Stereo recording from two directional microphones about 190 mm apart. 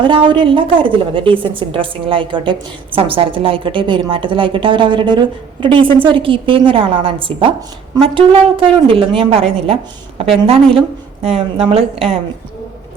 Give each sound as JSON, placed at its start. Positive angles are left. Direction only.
{"t": 0.0, "sound": "a woman's voice", "side_deg": -25}